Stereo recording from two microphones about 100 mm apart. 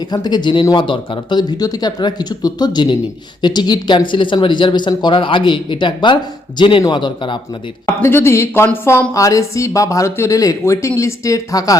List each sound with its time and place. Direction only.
0.1 s a man's voice: 45° left (ahead or behind)
7.9 s speech: 25° left (ahead or behind)